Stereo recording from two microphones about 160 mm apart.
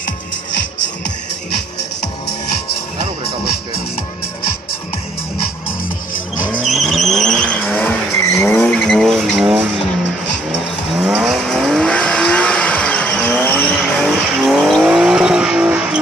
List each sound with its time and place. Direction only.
6.6 s vehicle: centre (ahead or behind)
8.2 s vehicle: 20° left (ahead or behind); by 9.7 s 5° right (ahead or behind)
11.0 s vehicle: 5° right (ahead or behind)